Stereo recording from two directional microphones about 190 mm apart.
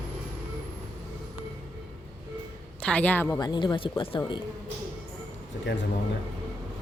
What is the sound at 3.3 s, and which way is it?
Speech, 20° left (ahead or behind).